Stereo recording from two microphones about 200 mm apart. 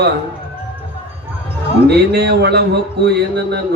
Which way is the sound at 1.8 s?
55° right (ahead or behind).